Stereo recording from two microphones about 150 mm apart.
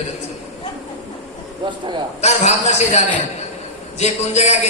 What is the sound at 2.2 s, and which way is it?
A woman's voice, 50° left (ahead or behind).